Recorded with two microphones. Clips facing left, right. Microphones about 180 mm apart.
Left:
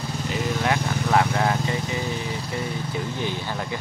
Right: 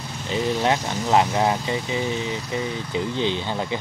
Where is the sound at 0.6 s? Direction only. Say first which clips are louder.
Right 2 dB; 25° right (ahead or behind).